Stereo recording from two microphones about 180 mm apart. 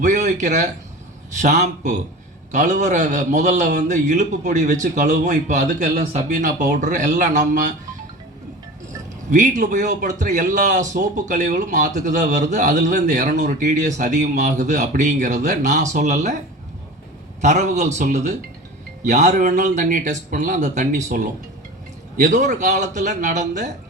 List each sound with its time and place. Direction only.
0.0 s a man's voice: 40° right (ahead or behind)
9.3 s speech: 45° right (ahead or behind)
17.4 s speech: 40° right (ahead or behind)
22.2 s speech: 40° right (ahead or behind)